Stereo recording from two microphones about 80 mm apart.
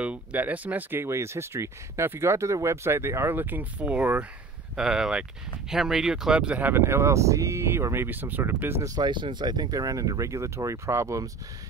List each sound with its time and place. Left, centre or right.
0.0 s speech: centre
4.7 s speech: centre
6.7 s speech: right
8.8 s speech: right